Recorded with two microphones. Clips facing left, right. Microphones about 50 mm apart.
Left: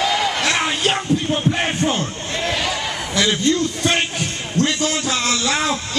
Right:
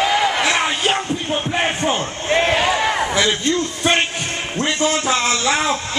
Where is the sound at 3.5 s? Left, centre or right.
Centre.